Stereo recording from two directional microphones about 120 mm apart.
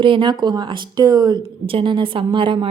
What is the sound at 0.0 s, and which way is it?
Speech, 45° right (ahead or behind).